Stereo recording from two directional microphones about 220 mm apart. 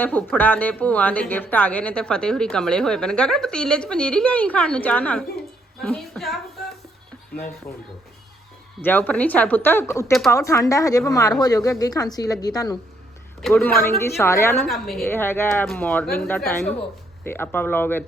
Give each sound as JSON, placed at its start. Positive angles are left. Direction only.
{"t": 0.0, "sound": "a woman's voice", "side_deg": 10}
{"t": 8.8, "sound": "a woman's voice", "side_deg": 10}
{"t": 10.1, "sound": "a woman's voice", "side_deg": 0}
{"t": 10.3, "sound": "a woman's voice", "side_deg": 15}
{"t": 13.4, "sound": "a woman's voice", "side_deg": 5}
{"t": 14.7, "sound": "a woman's voice", "side_deg": 0}